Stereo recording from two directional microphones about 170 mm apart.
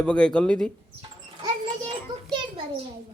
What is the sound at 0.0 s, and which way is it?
Speech, 5° left (ahead or behind).